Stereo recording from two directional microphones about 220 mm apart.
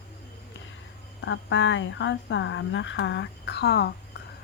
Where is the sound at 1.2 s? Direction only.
55° left (ahead or behind).